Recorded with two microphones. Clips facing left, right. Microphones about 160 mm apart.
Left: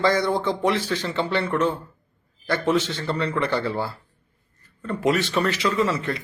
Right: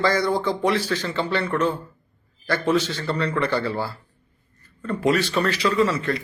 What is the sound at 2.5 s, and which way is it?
Speech, 20° left (ahead or behind).